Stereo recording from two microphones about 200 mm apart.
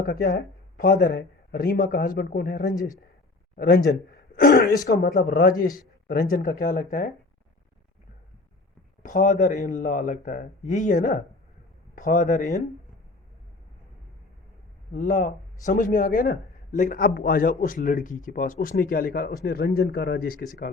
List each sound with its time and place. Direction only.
0.0 s a man's voice: 50° left (ahead or behind)
9.0 s a man's voice: 40° left (ahead or behind)
14.9 s a man's voice: 40° left (ahead or behind)